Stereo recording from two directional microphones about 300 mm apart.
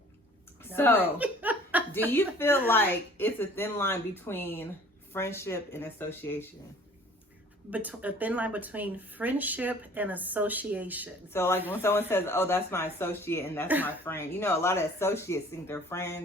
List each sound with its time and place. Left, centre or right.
0.6 s a sound: centre
1.0 s chuckle: centre
2.1 s speech: centre
7.7 s speech: centre
11.3 s speech: centre